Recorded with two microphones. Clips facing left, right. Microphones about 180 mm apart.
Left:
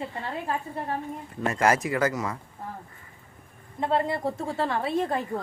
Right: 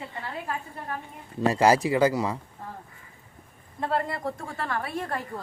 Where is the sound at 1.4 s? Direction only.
30° right (ahead or behind).